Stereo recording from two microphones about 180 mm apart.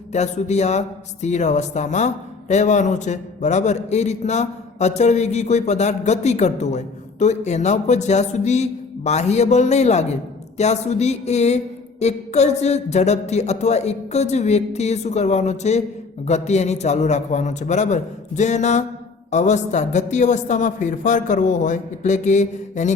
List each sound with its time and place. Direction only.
0.1 s a man's voice: 40° left (ahead or behind)